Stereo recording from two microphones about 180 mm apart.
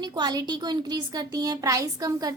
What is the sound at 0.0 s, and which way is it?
A woman's voice, 25° right (ahead or behind).